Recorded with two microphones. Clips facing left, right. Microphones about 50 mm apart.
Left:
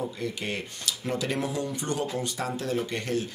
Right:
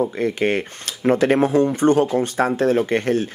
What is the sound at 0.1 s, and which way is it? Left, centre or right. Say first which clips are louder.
Speech: right 12 dB; right.